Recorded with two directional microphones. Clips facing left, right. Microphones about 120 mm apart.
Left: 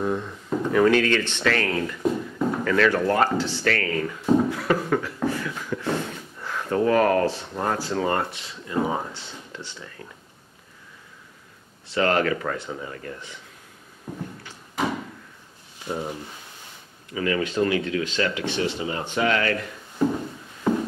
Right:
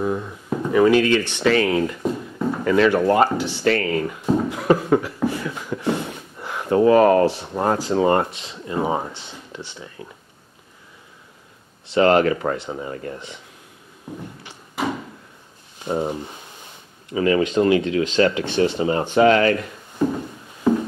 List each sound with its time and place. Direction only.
0.0 s speech: 10° right (ahead or behind)
4.6 s beatboxing: 20° right (ahead or behind)
7.8 s speech: 25° right (ahead or behind)
11.9 s speech: 25° right (ahead or behind)
15.8 s speech: 25° right (ahead or behind)